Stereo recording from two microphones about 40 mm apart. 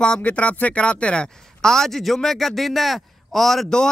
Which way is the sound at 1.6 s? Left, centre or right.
Centre.